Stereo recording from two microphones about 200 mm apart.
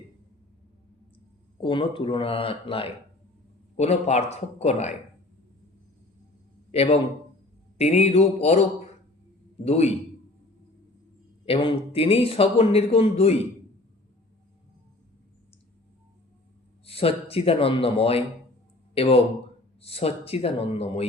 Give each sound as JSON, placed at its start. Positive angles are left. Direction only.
{"t": 1.6, "sound": "speech", "side_deg": 25}
{"t": 6.7, "sound": "a man's voice", "side_deg": 30}
{"t": 9.6, "sound": "speech", "side_deg": 30}
{"t": 11.4, "sound": "speech", "side_deg": 25}
{"t": 16.8, "sound": "speech", "side_deg": 30}